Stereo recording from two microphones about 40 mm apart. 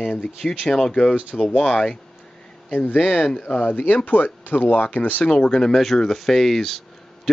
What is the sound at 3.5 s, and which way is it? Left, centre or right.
Speech, left.